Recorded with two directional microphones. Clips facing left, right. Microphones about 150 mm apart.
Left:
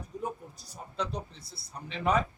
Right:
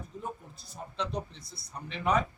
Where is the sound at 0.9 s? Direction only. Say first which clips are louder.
Even; 30° left (ahead or behind).